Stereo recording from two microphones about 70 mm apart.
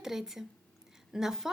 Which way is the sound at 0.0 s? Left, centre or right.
Centre.